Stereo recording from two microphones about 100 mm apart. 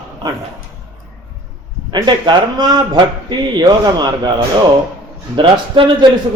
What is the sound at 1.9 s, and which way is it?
A man's voice, 45° right (ahead or behind).